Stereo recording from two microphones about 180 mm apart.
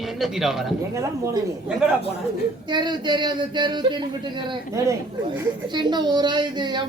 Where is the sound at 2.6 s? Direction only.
25° right (ahead or behind).